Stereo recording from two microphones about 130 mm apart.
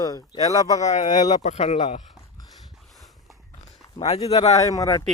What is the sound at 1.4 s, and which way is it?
Speech, 60° left (ahead or behind).